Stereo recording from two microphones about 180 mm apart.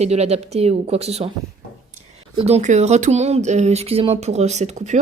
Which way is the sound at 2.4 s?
35° right (ahead or behind).